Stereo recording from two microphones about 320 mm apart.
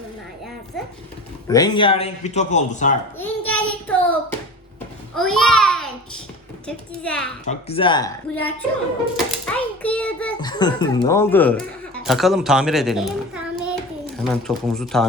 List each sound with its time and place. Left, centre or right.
1.5 s speech: centre
3.2 s a child's voice: centre
7.4 s a woman's voice: centre